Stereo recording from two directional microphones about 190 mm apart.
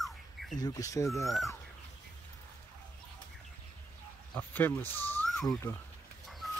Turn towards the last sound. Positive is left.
turn(degrees=0)  # may be behind; listen again after turning